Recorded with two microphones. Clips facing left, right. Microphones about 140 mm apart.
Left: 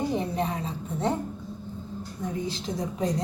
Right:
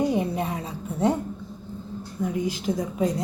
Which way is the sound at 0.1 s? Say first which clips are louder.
Right 2 dB; 10° right (ahead or behind).